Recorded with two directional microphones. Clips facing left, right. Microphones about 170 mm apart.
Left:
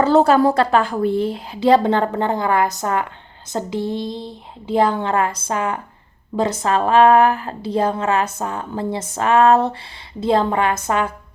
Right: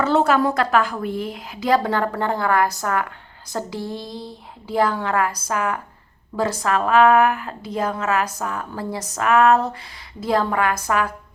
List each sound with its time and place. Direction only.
0.0 s a woman's voice: 35° left (ahead or behind)